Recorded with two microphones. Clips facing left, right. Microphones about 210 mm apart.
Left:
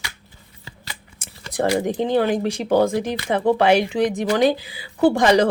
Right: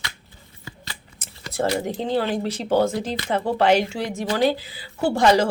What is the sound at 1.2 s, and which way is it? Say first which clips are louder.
A woman's voice: left 2 dB; 15° left (ahead or behind).